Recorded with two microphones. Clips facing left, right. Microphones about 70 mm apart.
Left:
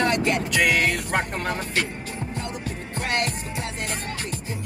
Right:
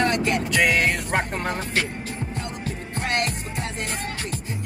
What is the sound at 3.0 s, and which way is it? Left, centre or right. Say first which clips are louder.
Music: right 1 dB; right.